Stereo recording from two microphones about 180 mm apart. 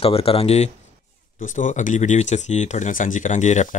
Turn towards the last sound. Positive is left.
turn(degrees=40)  # may be behind; listen again after turning